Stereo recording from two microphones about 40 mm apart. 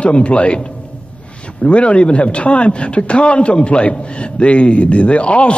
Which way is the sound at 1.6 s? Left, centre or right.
Left.